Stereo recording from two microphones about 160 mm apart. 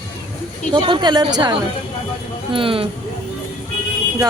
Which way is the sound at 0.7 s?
30° right (ahead or behind).